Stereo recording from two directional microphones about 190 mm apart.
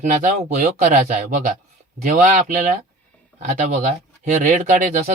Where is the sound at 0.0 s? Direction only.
40° right (ahead or behind).